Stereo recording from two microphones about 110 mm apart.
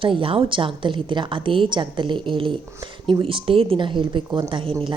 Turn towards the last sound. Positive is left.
turn(degrees=-55)  # may be behind; listen again after turning